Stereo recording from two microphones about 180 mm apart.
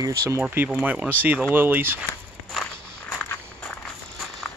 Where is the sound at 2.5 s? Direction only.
5° left (ahead or behind).